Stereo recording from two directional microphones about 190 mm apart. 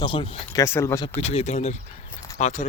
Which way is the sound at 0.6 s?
15° left (ahead or behind).